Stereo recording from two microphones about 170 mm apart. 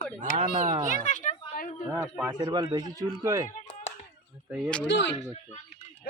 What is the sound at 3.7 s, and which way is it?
Hands, 40° left (ahead or behind).